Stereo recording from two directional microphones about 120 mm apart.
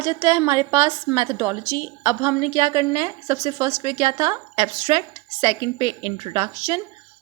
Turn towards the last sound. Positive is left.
turn(degrees=-40)  # may be behind; listen again after turning